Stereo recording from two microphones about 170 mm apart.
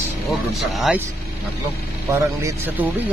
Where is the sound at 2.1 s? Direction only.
15° right (ahead or behind).